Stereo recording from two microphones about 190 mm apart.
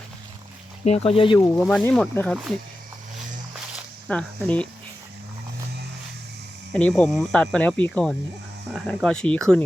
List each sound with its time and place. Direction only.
0.9 s speech: 35° left (ahead or behind)
1.5 s speech: 5° left (ahead or behind)
4.1 s speech: 5° left (ahead or behind)
6.7 s speech: 5° left (ahead or behind)